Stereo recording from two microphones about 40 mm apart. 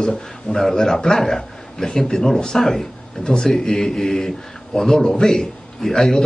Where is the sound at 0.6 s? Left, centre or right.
Centre.